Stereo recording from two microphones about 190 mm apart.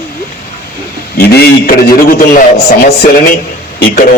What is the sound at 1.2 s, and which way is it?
A man's voice, 55° left (ahead or behind).